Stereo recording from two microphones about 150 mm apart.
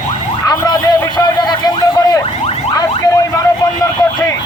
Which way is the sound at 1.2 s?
25° left (ahead or behind).